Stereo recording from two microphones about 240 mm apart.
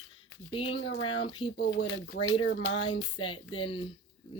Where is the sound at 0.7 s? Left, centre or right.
Left.